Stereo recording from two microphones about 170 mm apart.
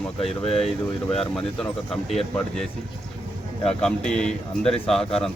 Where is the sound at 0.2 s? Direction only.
35° left (ahead or behind).